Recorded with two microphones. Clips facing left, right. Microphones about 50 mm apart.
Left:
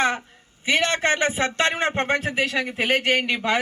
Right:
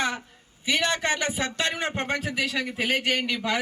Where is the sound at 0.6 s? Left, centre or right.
Left.